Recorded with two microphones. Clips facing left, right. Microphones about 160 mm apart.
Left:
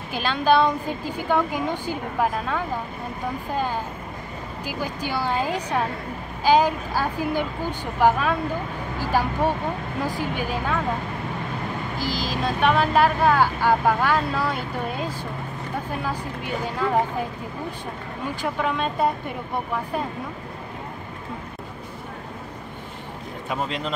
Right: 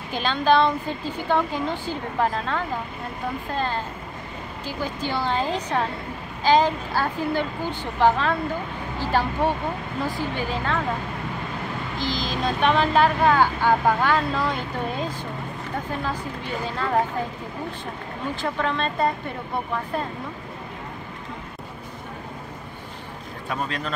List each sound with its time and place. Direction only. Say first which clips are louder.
0.1 s a woman's voice: even; 5° left (ahead or behind)
10.0 s a woman's voice: even; 15° left (ahead or behind)
12.0 s a woman's voice: right 1 dB; 5° left (ahead or behind)
18.3 s a woman's voice: even; 10° left (ahead or behind)
23.5 s a man's voice: left 1 dB; 20° left (ahead or behind)